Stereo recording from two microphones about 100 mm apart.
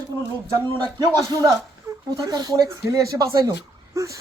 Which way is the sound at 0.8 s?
40° right (ahead or behind).